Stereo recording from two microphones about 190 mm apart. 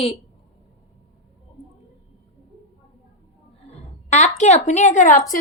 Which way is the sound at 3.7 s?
40° left (ahead or behind).